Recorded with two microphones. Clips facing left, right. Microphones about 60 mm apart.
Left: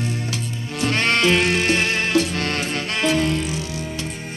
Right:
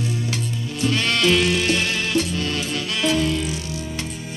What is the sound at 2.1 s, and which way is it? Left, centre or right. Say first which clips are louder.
Music: left 2 dB; left.